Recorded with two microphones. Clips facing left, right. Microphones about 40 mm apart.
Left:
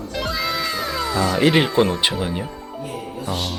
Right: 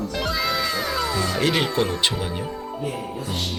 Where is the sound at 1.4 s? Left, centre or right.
Centre.